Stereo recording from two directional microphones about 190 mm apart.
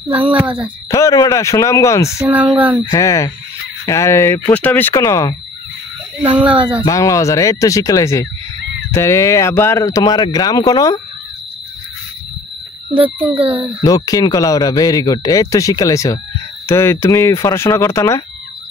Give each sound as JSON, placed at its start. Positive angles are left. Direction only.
{"t": 0.1, "sound": "speech", "side_deg": -10}
{"t": 0.8, "sound": "speech", "side_deg": 15}
{"t": 2.1, "sound": "speech", "side_deg": -10}
{"t": 2.9, "sound": "speech", "side_deg": 15}
{"t": 6.2, "sound": "speech", "side_deg": -5}
{"t": 6.8, "sound": "speech", "side_deg": 15}
{"t": 13.8, "sound": "speech", "side_deg": 20}